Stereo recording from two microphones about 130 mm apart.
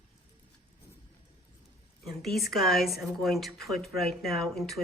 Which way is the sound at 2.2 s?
Centre (ahead or behind).